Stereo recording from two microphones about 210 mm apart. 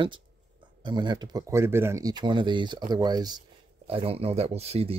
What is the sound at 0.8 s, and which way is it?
Speech, 20° right (ahead or behind).